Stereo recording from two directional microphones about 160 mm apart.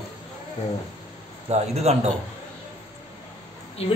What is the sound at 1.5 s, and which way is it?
Speech, 40° right (ahead or behind).